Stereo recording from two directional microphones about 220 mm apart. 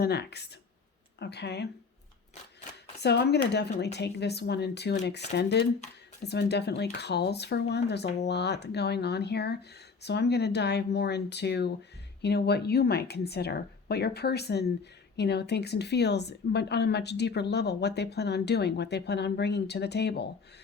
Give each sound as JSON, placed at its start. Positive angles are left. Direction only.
{"t": 0.0, "sound": "speech", "side_deg": 50}
{"t": 3.0, "sound": "speech", "side_deg": 50}